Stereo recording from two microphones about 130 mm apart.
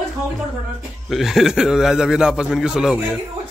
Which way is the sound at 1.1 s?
Centre (ahead or behind).